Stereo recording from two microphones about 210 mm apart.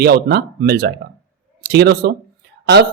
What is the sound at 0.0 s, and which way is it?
Speech, 50° right (ahead or behind).